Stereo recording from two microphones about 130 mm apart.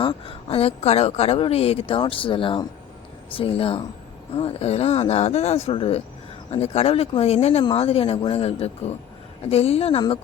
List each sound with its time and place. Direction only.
0.0 s a woman's voice: 40° left (ahead or behind)